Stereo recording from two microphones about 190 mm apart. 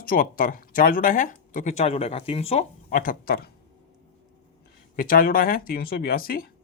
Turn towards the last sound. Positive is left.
turn(degrees=50)  # may be behind; listen again after turning